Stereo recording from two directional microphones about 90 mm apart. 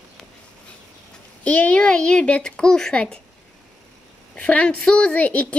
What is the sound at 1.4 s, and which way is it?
A child's voice, 15° left (ahead or behind).